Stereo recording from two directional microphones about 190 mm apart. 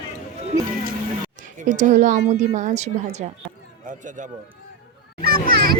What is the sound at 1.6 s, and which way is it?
A woman's voice, 40° right (ahead or behind).